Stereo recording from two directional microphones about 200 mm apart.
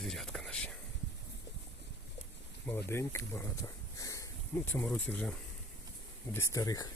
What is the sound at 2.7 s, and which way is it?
Speech, 10° left (ahead or behind).